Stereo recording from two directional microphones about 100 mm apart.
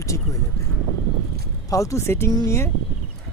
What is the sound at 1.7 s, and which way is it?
Speech, 30° left (ahead or behind).